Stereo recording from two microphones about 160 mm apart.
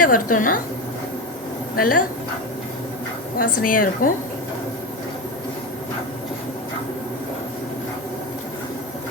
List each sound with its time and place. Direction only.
0.0 s a woman's voice: 60° left (ahead or behind)
1.7 s a woman's voice: 60° left (ahead or behind)
3.3 s a woman's voice: 60° left (ahead or behind)